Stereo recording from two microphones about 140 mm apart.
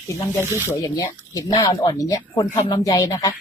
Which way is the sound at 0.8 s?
25° left (ahead or behind).